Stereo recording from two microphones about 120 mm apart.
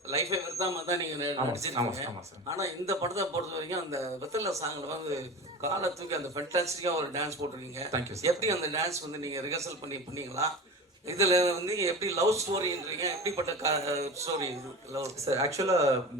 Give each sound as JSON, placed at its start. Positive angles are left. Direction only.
{"t": 0.1, "sound": "a man's voice", "side_deg": -25}
{"t": 5.6, "sound": "a man's voice", "side_deg": -25}